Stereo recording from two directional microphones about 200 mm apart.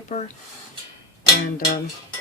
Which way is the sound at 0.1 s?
35° left (ahead or behind).